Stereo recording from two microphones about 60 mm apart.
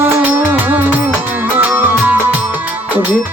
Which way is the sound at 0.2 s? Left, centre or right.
Right.